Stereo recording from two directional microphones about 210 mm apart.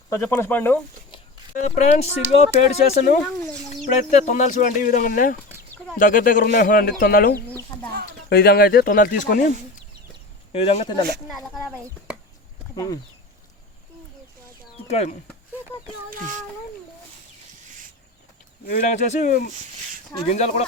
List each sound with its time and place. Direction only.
0.1 s speech: 15° left (ahead or behind)
1.5 s speech: 35° left (ahead or behind)
10.5 s speech: 30° left (ahead or behind)
11.3 s speech: centre (ahead or behind)
12.7 s speech: 15° left (ahead or behind)
14.8 s speech: 30° left (ahead or behind)
18.6 s speech: 40° left (ahead or behind)